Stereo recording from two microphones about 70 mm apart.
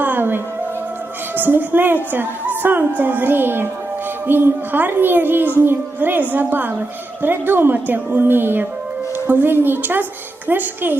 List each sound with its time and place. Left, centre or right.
0.0 s music: right
1.4 s a woman's voice: right